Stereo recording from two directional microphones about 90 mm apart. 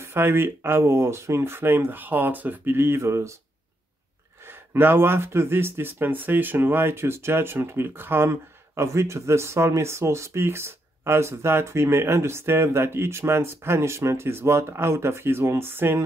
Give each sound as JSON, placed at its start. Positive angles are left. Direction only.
{"t": 0.0, "sound": "speech", "side_deg": -25}
{"t": 4.5, "sound": "speech", "side_deg": -25}